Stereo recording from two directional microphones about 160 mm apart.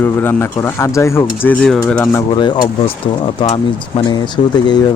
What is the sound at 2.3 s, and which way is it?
Speech, 30° left (ahead or behind).